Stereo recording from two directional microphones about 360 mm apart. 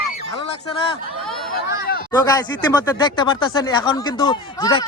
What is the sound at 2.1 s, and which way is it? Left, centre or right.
Speech, centre.